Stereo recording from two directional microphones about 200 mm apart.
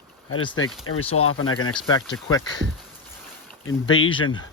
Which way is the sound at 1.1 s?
90° left.